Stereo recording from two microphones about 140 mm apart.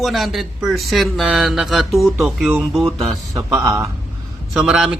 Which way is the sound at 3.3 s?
25° right (ahead or behind).